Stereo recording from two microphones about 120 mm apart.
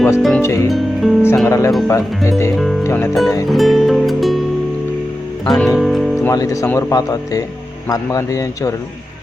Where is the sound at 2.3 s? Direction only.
25° left (ahead or behind).